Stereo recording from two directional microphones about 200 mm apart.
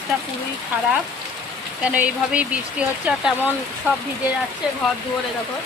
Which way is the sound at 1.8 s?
5° right (ahead or behind).